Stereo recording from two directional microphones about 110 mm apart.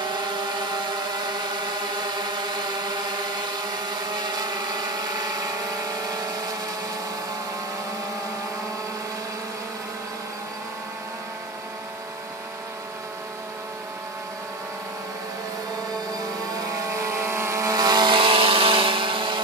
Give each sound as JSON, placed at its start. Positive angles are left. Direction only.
{"t": 1.2, "sound": "vehicle", "side_deg": -40}
{"t": 16.5, "sound": "vehicle", "side_deg": -25}